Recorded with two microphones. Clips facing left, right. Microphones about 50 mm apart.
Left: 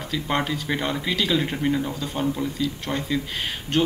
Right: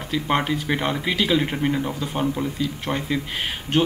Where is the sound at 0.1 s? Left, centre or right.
Centre.